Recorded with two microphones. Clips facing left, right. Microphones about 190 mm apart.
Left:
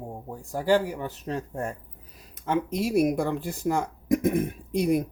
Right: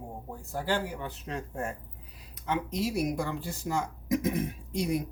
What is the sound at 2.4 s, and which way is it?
Speech, 50° left (ahead or behind).